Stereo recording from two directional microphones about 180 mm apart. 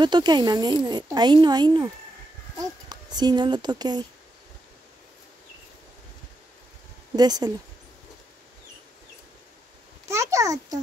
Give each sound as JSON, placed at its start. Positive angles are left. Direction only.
{"t": 0.0, "sound": "speech", "side_deg": -25}
{"t": 2.9, "sound": "speech", "side_deg": -25}
{"t": 7.2, "sound": "speech", "side_deg": -20}
{"t": 10.0, "sound": "a child's voice", "side_deg": -15}